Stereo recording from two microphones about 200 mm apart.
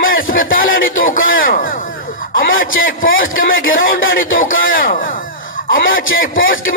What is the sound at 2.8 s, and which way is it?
A man's voice, 45° left (ahead or behind).